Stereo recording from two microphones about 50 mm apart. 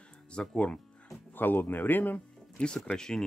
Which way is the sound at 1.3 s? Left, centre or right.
Left.